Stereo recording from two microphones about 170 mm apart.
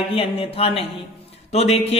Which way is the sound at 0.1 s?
35° left (ahead or behind).